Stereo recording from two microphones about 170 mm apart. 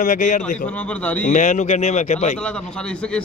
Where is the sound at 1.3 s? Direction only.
45° left (ahead or behind).